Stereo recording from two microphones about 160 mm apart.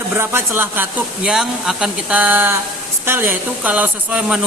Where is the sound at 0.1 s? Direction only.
15° right (ahead or behind).